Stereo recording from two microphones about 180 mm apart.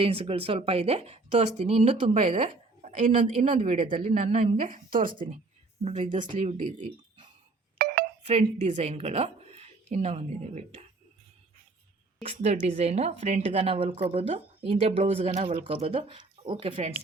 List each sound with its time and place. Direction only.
0.0 s speech: 30° right (ahead or behind)
3.4 s speech: 45° right (ahead or behind)
3.8 s speech: 30° right (ahead or behind)
4.7 s speech: 50° right (ahead or behind)
5.8 s speech: 35° right (ahead or behind)
7.8 s a sound: 55° right (ahead or behind)
8.2 s a woman's voice: 40° right (ahead or behind)
12.2 s speech: 35° right (ahead or behind)